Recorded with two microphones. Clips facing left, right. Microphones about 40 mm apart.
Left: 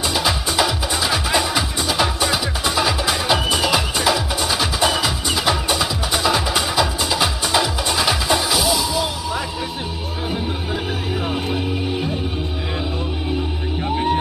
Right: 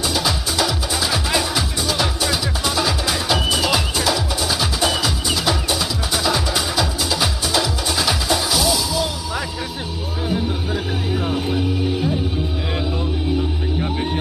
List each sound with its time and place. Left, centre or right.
0.1 s music: centre
11.2 s music: centre